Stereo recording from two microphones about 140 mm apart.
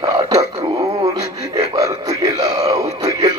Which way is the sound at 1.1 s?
25° right (ahead or behind).